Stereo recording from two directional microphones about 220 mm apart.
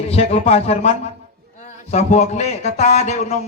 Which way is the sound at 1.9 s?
30° left (ahead or behind).